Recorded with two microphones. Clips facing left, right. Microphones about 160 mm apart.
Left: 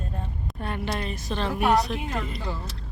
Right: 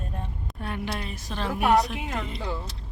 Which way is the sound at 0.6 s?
5° right (ahead or behind).